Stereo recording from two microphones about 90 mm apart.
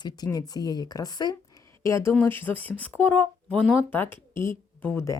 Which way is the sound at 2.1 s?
25° left (ahead or behind).